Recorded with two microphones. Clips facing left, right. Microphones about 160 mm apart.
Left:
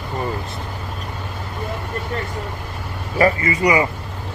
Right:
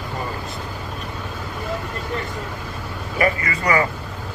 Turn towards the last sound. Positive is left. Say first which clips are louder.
# left 3 dB
turn(degrees=15)  # may be behind; listen again after turning